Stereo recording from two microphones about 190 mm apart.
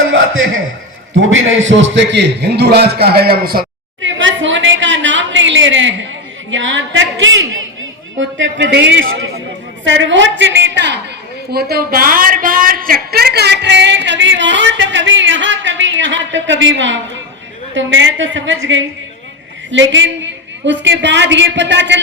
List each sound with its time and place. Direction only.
0.1 s a sound: 90° right
1.2 s a man's voice: 90° right; by 3.7 s 50° right (ahead or behind)
4.0 s a sound: 80° right
6.5 s a woman's voice: 80° right
8.2 s a woman's voice: 75° right (ahead or behind)
11.5 s a woman's voice: 55° right (ahead or behind); by 18.9 s 85° right
19.7 s a woman's voice: 75° right (ahead or behind)